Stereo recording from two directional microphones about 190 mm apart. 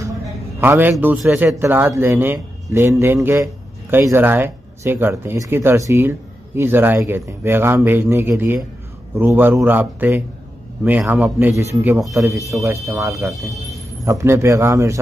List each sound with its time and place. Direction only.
0.6 s speech: 10° right (ahead or behind)
12.2 s speech: 15° right (ahead or behind)